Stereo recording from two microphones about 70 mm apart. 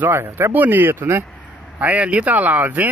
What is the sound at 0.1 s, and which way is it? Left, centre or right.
Speech, right.